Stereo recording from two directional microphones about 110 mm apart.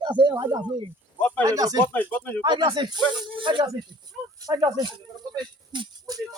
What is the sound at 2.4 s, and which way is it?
Speech, 45° right (ahead or behind).